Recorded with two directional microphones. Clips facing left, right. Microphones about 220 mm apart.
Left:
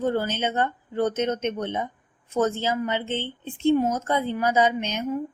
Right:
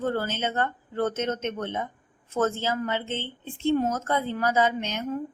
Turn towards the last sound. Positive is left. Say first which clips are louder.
# left 3 dB
turn(degrees=20)  # may be behind; listen again after turning